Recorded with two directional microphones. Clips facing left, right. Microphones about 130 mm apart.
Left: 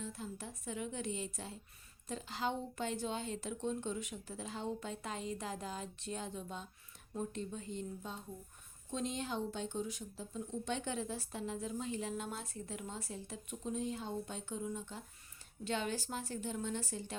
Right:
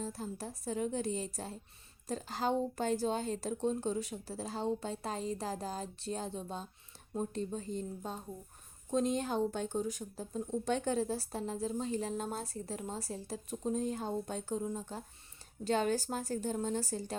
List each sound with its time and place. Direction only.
0.0 s speech: 40° right (ahead or behind)